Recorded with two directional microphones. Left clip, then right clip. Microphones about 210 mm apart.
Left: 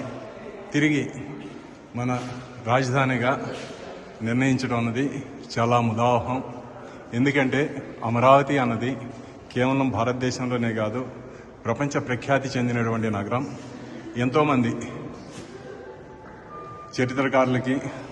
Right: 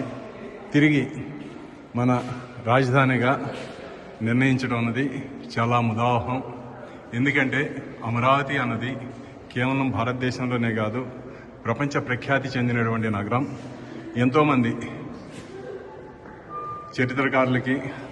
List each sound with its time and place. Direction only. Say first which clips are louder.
0.7 s a man's voice: right 2 dB; centre (ahead or behind)
17.0 s a man's voice: even; 10° left (ahead or behind)